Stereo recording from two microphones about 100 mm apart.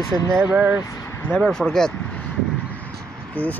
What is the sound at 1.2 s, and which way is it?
Speech, 15° left (ahead or behind).